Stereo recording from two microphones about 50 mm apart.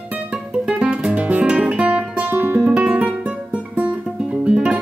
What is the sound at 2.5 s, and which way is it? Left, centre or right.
Music, right.